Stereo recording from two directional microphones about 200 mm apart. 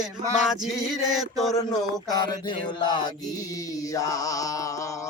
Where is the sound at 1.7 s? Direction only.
20° left (ahead or behind).